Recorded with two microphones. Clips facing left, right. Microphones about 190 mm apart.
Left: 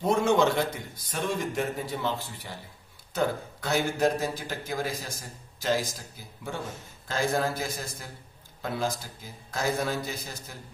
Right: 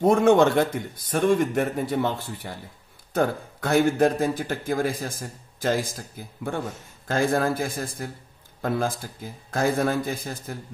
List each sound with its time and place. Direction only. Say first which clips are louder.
0.0 s a man's voice: right 6 dB; 50° right (ahead or behind)